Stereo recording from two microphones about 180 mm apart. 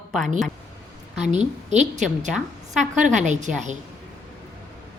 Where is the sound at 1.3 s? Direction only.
40° right (ahead or behind).